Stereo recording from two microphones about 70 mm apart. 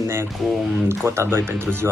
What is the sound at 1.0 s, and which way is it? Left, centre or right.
Speech, right.